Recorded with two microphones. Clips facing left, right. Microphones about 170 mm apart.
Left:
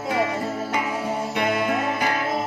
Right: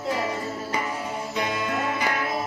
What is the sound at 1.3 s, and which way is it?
Music, 55° left (ahead or behind).